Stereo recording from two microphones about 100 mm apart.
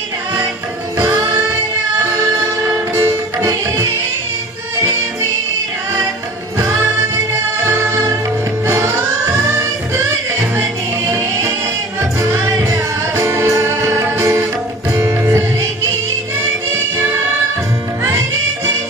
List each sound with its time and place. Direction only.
2.7 s music: 30° right (ahead or behind)
7.6 s music: 25° right (ahead or behind)
12.2 s music: 30° right (ahead or behind)